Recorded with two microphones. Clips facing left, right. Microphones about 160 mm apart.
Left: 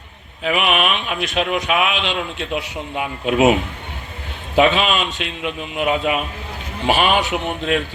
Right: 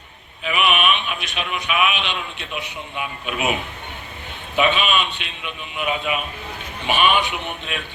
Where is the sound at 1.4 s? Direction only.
90° left.